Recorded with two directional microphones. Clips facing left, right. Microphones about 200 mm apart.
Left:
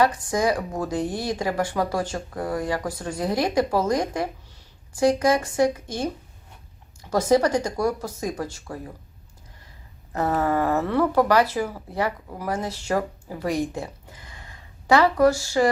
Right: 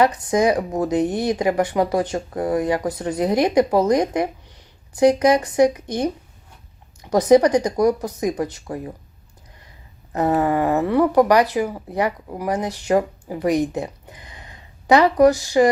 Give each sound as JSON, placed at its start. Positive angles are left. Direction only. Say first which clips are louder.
{"t": 0.0, "sound": "speech", "louder": "right 4 dB", "side_deg": -20}
{"t": 10.1, "sound": "speech", "louder": "right 4 dB", "side_deg": -15}